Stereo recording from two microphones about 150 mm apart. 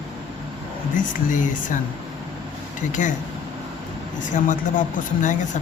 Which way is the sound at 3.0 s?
55° left (ahead or behind).